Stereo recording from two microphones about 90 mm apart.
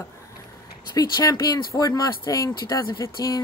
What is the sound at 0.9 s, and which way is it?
Speech, 40° left (ahead or behind).